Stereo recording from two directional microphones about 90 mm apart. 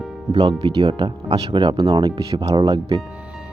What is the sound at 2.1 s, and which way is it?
Speech, 65° right (ahead or behind).